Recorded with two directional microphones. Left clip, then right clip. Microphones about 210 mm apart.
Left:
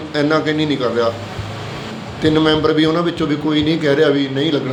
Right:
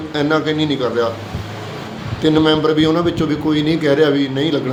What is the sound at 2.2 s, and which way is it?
A man's voice, 10° right (ahead or behind).